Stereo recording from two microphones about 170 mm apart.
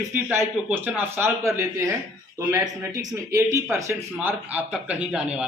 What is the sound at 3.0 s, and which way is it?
A man's voice, 20° right (ahead or behind).